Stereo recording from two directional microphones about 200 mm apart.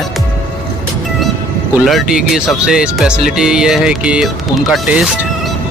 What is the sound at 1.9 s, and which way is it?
Speech, 5° right (ahead or behind).